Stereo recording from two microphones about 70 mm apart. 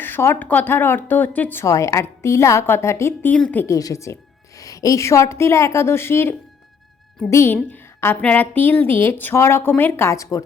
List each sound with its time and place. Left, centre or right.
0.0 s a sound: left
0.3 s a woman's voice: left
1.6 s a woman's voice: left
3.3 s a woman's voice: centre
3.7 s a woman's voice: left
7.5 s a woman's voice: left
10.1 s speech: left